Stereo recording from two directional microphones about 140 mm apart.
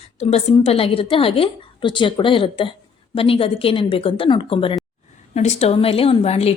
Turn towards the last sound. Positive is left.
turn(degrees=45)  # may be behind; listen again after turning